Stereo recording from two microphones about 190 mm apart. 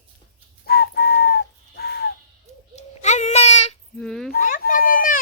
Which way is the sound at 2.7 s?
35° left (ahead or behind).